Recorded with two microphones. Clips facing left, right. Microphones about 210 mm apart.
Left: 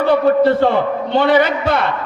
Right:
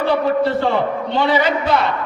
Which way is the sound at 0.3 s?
55° left (ahead or behind).